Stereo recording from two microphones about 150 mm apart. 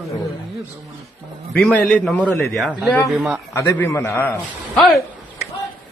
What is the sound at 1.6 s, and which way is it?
Speech, 5° left (ahead or behind).